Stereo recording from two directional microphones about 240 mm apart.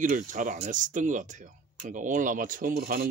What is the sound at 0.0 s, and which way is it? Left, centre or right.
Speech, right.